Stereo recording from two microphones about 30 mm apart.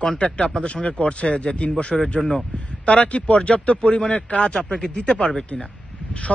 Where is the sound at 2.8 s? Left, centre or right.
Left.